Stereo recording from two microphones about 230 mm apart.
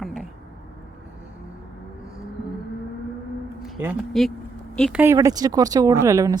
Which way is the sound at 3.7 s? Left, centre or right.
Centre.